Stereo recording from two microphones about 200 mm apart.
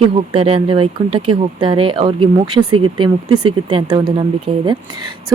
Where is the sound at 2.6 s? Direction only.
90° right.